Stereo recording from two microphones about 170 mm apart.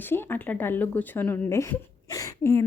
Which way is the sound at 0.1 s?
10° left (ahead or behind).